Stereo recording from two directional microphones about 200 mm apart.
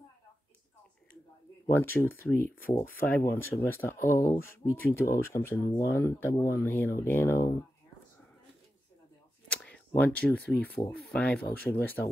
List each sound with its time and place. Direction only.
1.7 s speech: 10° left (ahead or behind)
9.5 s speech: 5° left (ahead or behind)